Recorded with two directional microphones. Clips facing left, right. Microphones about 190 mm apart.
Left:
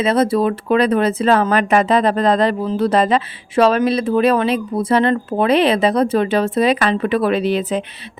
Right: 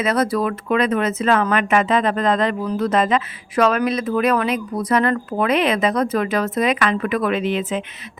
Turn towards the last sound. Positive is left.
turn(degrees=35)  # may be behind; listen again after turning